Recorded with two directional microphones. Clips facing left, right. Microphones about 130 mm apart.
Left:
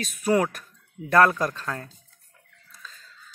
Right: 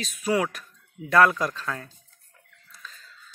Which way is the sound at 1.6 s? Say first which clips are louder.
Even; 30° left (ahead or behind).